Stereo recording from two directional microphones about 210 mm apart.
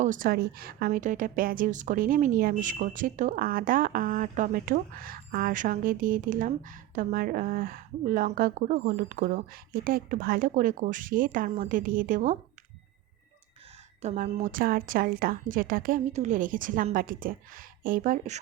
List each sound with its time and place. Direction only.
0.0 s a woman's voice: 40° right (ahead or behind)
14.0 s a woman's voice: 30° right (ahead or behind)